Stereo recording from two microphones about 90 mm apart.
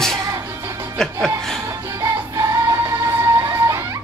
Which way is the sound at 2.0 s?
35° right (ahead or behind).